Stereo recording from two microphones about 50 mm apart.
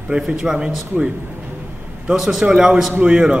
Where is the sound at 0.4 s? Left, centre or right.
Centre.